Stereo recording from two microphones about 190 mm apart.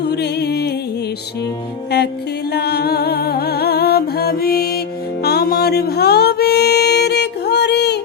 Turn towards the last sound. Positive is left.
turn(degrees=60)  # may be behind; listen again after turning